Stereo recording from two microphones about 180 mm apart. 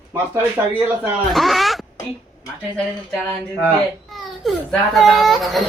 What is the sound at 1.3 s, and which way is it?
A child's voice, centre (ahead or behind).